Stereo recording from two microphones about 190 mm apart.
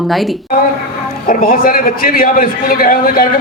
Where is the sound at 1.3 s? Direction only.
50° left (ahead or behind).